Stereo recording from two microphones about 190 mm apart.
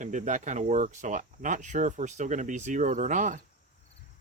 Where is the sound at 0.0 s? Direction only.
40° right (ahead or behind).